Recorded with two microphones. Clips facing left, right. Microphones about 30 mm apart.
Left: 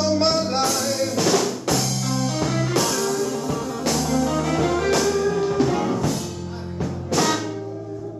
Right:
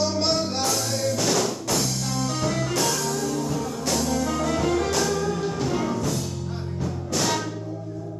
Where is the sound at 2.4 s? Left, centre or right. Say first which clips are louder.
Left 2 dB; left.